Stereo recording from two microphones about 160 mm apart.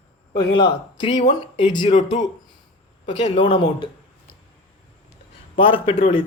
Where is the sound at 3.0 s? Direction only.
35° left (ahead or behind).